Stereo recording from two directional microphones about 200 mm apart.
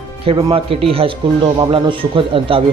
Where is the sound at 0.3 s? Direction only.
25° right (ahead or behind).